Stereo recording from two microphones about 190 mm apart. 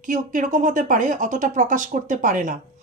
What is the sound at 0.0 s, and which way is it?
Speech, 45° right (ahead or behind).